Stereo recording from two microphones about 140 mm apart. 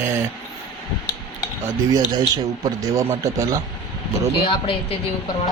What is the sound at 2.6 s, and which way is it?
Speech, 25° right (ahead or behind).